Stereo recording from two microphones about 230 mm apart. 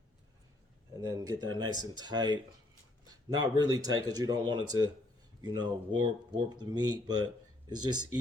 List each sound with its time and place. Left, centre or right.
0.9 s speech: centre